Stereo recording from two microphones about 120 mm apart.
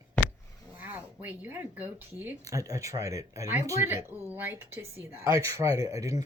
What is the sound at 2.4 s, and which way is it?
Speech, 30° right (ahead or behind).